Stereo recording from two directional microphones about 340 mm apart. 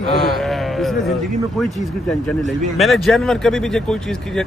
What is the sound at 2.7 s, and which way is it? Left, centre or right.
Speech, centre.